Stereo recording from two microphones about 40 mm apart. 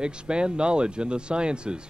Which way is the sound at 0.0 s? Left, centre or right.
Right.